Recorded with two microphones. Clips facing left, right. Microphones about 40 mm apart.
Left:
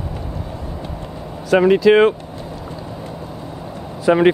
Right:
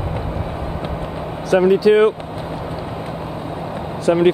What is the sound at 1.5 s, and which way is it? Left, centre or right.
Speech, left.